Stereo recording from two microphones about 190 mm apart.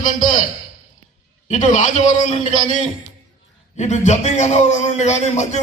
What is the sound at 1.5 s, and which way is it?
Speech, 40° left (ahead or behind).